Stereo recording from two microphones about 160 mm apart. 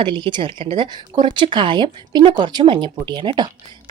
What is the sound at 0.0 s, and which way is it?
A woman's voice, 30° right (ahead or behind).